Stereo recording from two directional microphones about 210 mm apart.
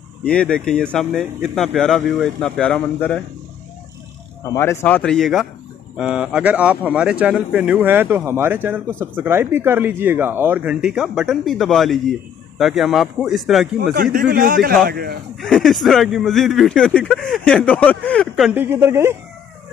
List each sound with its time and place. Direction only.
0.2 s speech: 5° left (ahead or behind)
4.6 s speech: 10° left (ahead or behind)
13.9 s a man's voice: 45° right (ahead or behind)
15.4 s speech: centre (ahead or behind)